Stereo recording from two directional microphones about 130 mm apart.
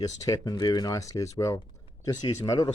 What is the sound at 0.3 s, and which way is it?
Speech, 30° left (ahead or behind).